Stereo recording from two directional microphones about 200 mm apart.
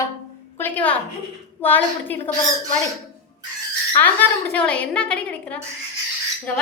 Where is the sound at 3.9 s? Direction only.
10° left (ahead or behind).